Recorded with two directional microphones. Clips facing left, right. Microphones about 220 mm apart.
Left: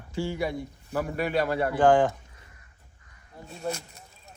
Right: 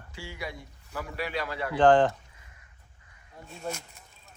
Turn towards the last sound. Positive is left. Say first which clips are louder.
# left 4 dB
turn(degrees=40)  # may be behind; listen again after turning